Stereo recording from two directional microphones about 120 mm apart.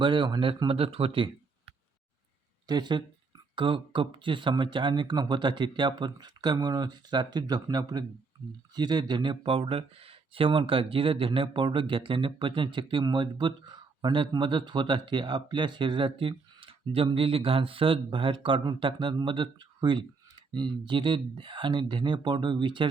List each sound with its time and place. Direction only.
0.0 s speech: 45° right (ahead or behind)
2.6 s speech: 35° right (ahead or behind)